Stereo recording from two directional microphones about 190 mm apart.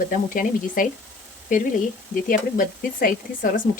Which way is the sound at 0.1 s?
45° left (ahead or behind).